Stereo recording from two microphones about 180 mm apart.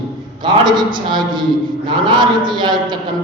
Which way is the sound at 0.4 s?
25° right (ahead or behind).